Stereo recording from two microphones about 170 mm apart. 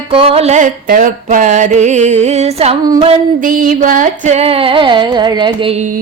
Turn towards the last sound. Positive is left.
turn(degrees=-35)  # may be behind; listen again after turning